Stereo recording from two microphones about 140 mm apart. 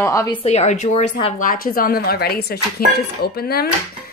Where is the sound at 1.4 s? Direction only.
85° left.